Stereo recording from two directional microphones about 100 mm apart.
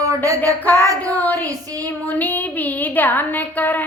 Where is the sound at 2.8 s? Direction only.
20° left (ahead or behind).